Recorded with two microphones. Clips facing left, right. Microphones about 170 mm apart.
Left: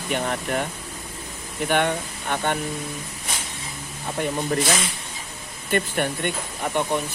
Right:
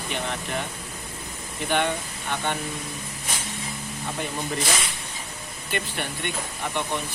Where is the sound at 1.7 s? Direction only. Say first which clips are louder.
Left 2 dB; 50° left (ahead or behind).